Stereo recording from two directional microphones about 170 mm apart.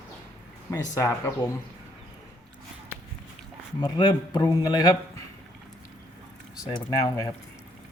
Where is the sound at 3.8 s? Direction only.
30° left (ahead or behind).